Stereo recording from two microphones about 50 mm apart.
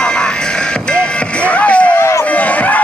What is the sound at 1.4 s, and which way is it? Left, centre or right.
Music, left.